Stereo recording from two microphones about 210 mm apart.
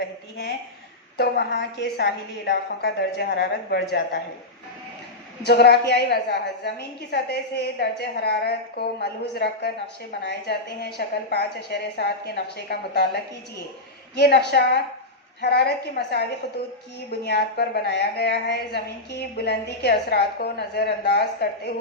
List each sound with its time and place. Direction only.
1.1 s a woman's voice: 50° left (ahead or behind)
5.5 s a woman's voice: 50° left (ahead or behind)
14.2 s a woman's voice: 50° left (ahead or behind)